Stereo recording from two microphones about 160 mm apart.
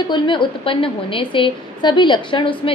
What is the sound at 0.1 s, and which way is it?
A woman's voice, 30° left (ahead or behind).